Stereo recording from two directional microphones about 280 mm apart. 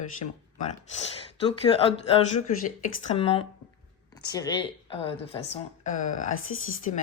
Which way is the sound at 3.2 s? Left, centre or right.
Centre.